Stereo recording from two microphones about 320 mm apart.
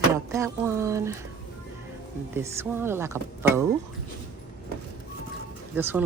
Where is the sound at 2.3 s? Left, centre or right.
Centre.